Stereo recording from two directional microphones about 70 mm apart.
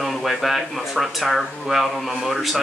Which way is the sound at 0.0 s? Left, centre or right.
Centre.